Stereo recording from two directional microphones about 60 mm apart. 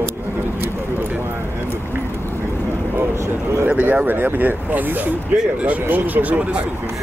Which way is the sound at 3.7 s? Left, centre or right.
Right.